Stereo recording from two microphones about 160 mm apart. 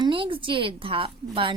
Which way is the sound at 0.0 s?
35° right (ahead or behind).